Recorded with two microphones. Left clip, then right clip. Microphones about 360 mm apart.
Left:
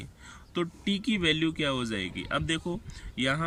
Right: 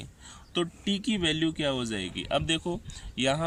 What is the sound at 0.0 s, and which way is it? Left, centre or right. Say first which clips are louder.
Speech: even; centre.